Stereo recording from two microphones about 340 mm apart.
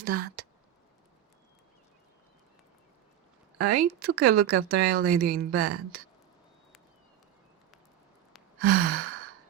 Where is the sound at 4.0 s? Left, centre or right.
Right.